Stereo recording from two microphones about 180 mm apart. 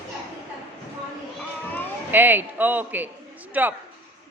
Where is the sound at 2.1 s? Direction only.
10° right (ahead or behind).